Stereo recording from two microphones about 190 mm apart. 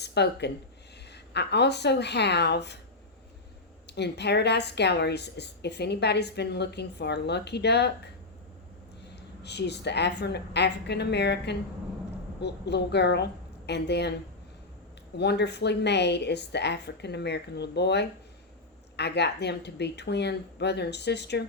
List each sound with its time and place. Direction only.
0.0 s a woman's voice: 60° left (ahead or behind)
3.8 s a woman's voice: 60° left (ahead or behind)
9.4 s a woman's voice: 60° left (ahead or behind)
15.2 s a woman's voice: 60° left (ahead or behind)